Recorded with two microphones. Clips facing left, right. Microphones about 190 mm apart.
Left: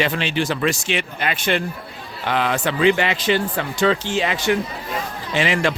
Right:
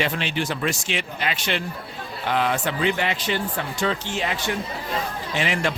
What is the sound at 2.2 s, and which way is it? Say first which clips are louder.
Speech: left 2 dB; 90° left.